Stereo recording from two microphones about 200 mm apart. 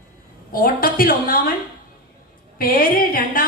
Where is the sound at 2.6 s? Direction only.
45° left (ahead or behind).